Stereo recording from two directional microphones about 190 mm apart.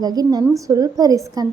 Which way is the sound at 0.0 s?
20° right (ahead or behind).